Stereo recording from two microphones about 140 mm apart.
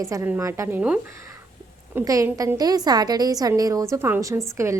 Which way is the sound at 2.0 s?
20° right (ahead or behind).